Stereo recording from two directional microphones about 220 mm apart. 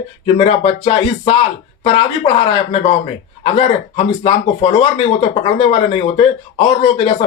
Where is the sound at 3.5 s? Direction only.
25° left (ahead or behind).